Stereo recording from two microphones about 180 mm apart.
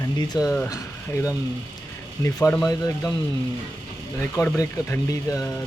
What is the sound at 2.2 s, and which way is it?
Speech, 15° left (ahead or behind).